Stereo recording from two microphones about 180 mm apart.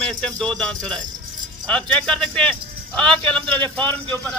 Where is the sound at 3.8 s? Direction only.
25° right (ahead or behind).